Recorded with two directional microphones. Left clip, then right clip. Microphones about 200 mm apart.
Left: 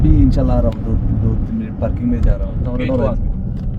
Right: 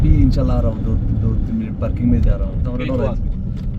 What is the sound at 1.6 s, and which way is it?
Speech, 35° right (ahead or behind).